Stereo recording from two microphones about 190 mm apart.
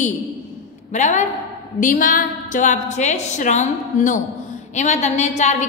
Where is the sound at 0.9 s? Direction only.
40° left (ahead or behind).